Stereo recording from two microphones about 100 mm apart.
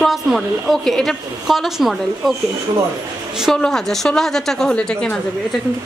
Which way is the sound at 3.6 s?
5° left (ahead or behind).